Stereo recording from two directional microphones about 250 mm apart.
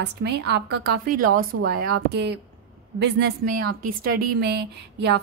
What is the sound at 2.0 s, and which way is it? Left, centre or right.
A woman's voice, right.